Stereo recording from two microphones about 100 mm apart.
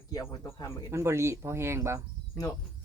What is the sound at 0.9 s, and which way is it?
Speech, 25° right (ahead or behind).